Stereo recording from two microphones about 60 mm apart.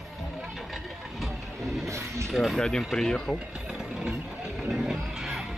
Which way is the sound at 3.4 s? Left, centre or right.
Centre.